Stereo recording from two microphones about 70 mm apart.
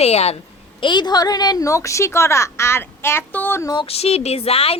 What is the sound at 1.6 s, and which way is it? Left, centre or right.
A woman's voice, left.